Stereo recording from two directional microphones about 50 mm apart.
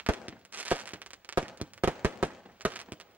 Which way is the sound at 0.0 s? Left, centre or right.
Right.